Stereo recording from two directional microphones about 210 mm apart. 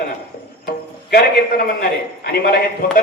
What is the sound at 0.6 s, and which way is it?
A man's voice, 45° left (ahead or behind).